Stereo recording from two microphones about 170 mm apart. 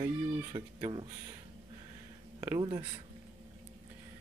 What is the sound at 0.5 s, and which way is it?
Speech, 30° right (ahead or behind).